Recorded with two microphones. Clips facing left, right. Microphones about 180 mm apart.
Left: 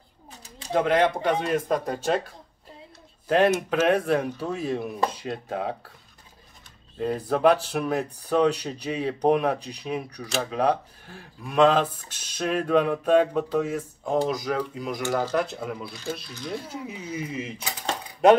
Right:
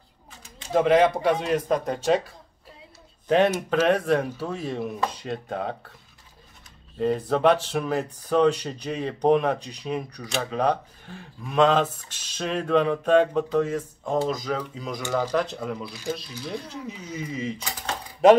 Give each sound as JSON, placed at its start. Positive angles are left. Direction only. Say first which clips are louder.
{"t": 0.7, "sound": "speech", "louder": "right 3 dB", "side_deg": 0}
{"t": 7.0, "sound": "speech", "louder": "right 1 dB", "side_deg": 0}